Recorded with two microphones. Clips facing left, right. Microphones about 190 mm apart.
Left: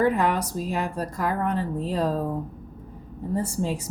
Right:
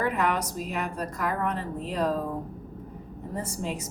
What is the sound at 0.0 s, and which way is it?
A woman's voice, 30° left (ahead or behind).